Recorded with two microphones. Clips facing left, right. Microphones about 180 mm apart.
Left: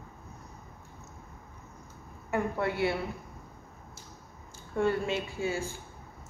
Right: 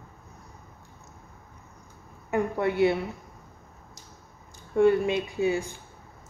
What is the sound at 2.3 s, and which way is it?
Speech, 20° right (ahead or behind).